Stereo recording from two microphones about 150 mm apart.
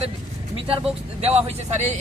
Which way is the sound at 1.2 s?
45° right (ahead or behind).